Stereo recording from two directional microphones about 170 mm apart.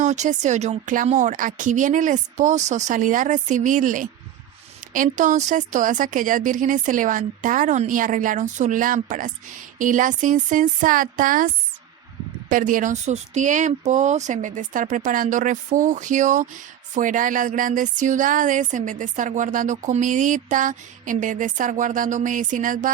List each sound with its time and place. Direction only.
0.0 s speech: 45° right (ahead or behind)